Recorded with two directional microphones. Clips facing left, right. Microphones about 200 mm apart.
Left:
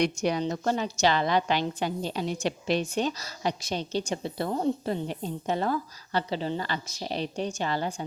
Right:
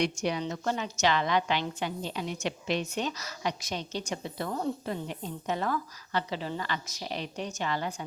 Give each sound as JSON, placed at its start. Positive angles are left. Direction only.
{"t": 0.0, "sound": "a woman's voice", "side_deg": 40}